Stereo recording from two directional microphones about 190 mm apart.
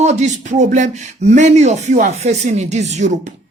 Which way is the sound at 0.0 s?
35° right (ahead or behind).